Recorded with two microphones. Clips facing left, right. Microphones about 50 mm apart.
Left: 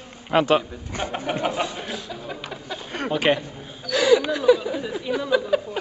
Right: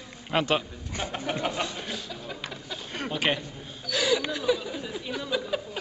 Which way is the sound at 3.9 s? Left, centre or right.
Left.